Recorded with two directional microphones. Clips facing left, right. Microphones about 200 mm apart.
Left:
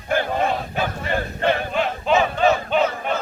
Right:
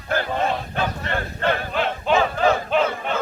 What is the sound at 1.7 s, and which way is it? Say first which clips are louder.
Choir: left 1 dB; centre (ahead or behind).